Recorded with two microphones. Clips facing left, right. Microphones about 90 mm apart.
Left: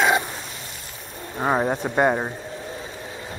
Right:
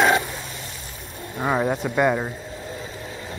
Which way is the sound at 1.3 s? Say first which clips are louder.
Left 1 dB; 30° left (ahead or behind).